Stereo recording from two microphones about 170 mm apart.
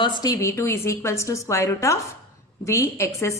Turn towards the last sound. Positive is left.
turn(degrees=15)  # may be behind; listen again after turning